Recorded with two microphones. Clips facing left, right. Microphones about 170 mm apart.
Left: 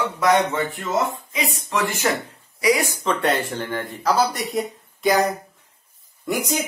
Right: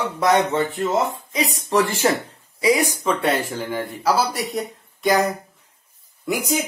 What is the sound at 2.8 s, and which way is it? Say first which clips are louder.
Speech: right 1 dB; 10° right (ahead or behind).